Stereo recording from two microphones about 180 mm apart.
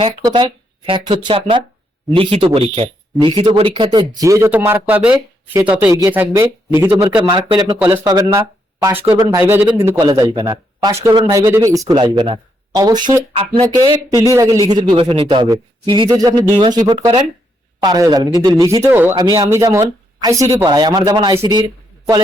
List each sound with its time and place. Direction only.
0.0 s speech: 25° right (ahead or behind)
7.8 s speech: 10° right (ahead or behind)
9.4 s speech: 10° right (ahead or behind)